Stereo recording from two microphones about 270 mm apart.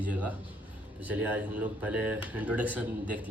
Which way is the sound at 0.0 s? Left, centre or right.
Centre.